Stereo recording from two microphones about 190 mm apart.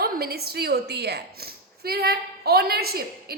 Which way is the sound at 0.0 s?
55° right (ahead or behind).